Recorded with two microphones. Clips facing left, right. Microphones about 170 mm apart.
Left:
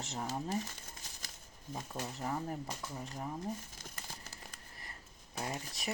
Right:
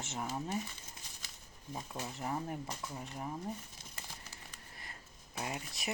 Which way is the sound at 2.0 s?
40° left (ahead or behind).